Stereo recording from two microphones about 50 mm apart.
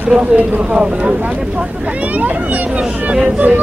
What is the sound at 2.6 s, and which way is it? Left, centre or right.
Speech, centre.